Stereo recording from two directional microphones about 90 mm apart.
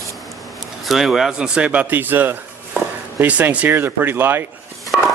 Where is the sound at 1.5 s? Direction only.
15° right (ahead or behind).